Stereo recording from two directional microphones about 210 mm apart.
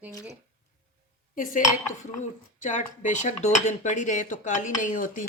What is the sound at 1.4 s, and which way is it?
Speech, 40° left (ahead or behind).